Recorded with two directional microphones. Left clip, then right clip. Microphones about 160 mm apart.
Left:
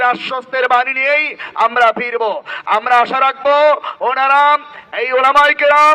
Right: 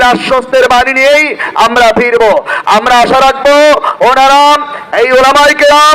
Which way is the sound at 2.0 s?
40° right (ahead or behind).